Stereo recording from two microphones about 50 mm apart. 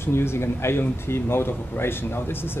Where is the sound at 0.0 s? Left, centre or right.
Left.